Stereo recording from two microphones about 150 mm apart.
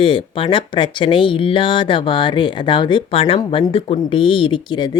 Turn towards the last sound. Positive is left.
turn(degrees=30)  # may be behind; listen again after turning